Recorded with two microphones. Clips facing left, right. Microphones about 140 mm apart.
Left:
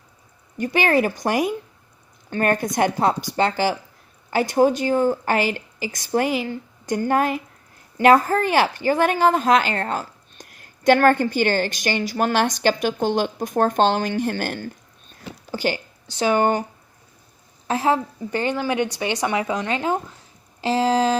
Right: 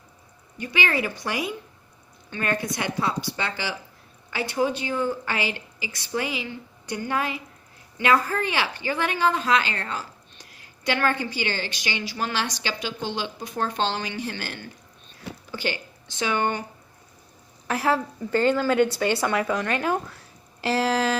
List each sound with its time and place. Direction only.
0.6 s a woman's voice: 45° left (ahead or behind)
17.7 s a woman's voice: 25° left (ahead or behind)